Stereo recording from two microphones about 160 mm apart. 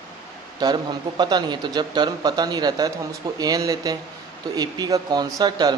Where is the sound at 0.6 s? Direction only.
25° right (ahead or behind).